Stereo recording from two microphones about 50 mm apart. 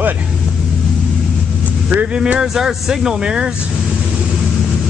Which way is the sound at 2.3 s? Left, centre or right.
Centre.